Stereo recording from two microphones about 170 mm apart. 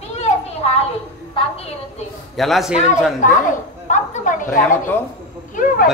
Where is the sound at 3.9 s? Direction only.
50° left (ahead or behind).